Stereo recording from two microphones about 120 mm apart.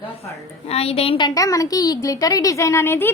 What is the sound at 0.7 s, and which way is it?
Speech, 55° left (ahead or behind).